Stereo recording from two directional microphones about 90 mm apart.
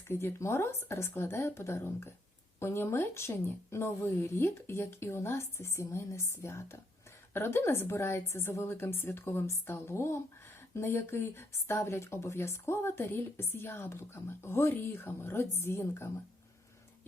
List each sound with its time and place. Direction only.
0.1 s speech: 30° left (ahead or behind)